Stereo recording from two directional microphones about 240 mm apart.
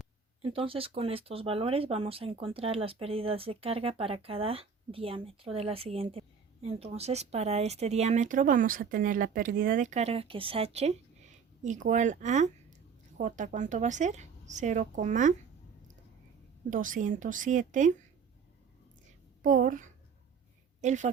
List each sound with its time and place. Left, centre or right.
0.5 s a woman's voice: right
16.6 s a woman's voice: right
19.4 s a woman's voice: right